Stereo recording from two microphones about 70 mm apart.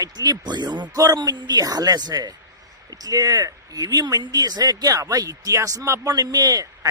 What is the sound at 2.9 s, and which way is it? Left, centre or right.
Speech, right.